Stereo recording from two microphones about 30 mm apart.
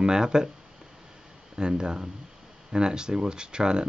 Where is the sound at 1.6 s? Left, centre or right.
Right.